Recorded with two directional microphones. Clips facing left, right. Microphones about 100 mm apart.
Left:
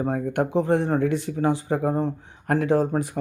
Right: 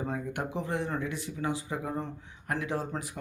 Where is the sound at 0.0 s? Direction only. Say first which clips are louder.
Left 10 dB; 55° left (ahead or behind).